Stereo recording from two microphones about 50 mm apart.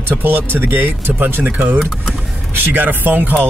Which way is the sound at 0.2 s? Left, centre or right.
Right.